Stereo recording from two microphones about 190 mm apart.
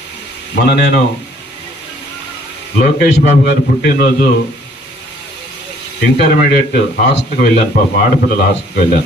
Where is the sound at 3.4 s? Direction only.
55° left (ahead or behind).